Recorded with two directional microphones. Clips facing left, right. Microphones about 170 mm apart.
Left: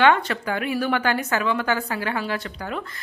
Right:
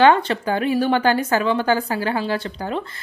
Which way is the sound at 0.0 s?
30° right (ahead or behind).